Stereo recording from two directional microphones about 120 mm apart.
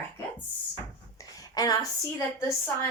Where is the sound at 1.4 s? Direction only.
30° left (ahead or behind).